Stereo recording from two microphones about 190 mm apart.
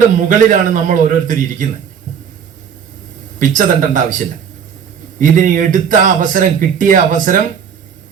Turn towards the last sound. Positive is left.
turn(degrees=-45)  # may be behind; listen again after turning